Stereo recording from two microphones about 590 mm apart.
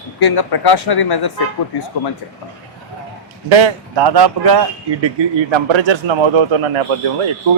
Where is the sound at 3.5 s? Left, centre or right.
Right.